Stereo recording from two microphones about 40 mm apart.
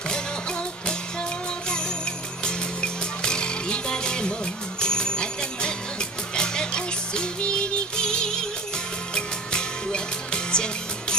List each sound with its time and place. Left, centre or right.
0.1 s music: centre
2.4 s music: left